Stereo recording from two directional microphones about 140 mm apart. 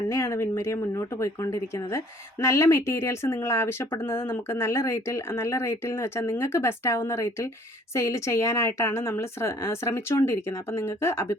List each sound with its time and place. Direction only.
0.1 s speech: 20° left (ahead or behind)